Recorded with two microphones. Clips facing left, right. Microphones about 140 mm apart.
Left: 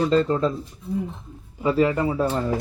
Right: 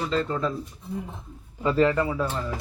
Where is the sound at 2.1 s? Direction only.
35° left (ahead or behind).